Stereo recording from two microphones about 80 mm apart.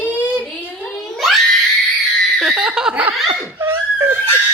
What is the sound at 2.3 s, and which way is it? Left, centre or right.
Giggle, centre.